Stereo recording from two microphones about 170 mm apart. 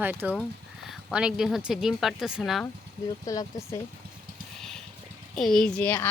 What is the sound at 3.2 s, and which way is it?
Speech, 20° left (ahead or behind).